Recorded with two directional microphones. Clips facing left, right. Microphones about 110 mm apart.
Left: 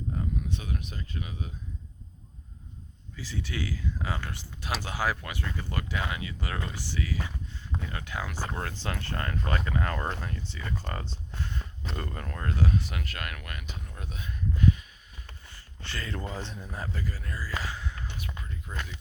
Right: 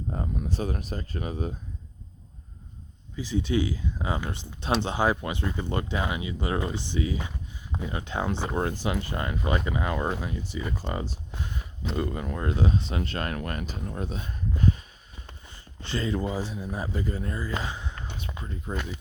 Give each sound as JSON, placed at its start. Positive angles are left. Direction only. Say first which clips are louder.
{"t": 0.1, "sound": "speech", "louder": "right 2 dB", "side_deg": -40}
{"t": 3.2, "sound": "speech", "louder": "right 9 dB", "side_deg": -20}
{"t": 15.4, "sound": "speech", "louder": "right 6 dB", "side_deg": -20}